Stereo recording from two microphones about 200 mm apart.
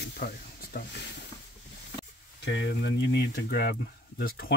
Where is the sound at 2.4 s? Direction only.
60° left (ahead or behind).